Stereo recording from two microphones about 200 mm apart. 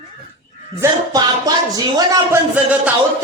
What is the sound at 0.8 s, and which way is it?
Speech, 20° right (ahead or behind).